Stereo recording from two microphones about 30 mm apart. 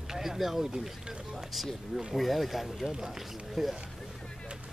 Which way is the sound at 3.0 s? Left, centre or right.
Centre.